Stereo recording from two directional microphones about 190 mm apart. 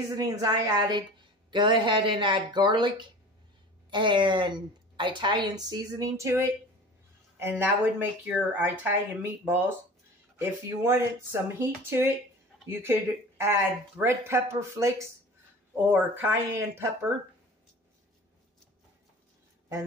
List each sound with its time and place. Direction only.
0.1 s a woman's voice: 20° right (ahead or behind)